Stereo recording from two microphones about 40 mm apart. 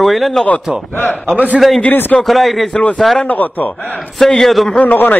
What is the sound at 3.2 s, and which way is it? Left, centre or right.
Speech, left.